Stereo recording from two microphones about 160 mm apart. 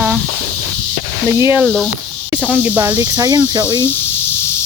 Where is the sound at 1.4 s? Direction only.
15° right (ahead or behind).